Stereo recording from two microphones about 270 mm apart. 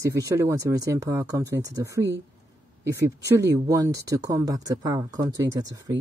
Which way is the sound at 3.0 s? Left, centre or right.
Centre.